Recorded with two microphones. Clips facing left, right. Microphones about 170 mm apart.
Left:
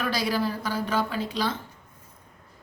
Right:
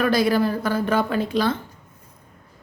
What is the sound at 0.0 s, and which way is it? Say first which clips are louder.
A woman's voice: right 7 dB; 55° right (ahead or behind).